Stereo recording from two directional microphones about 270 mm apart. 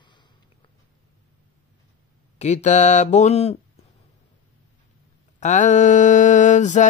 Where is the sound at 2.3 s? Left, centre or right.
Left.